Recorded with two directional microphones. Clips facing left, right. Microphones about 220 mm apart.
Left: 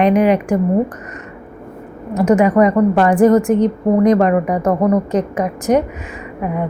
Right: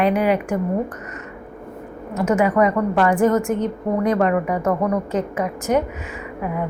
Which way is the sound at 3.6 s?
15° left (ahead or behind).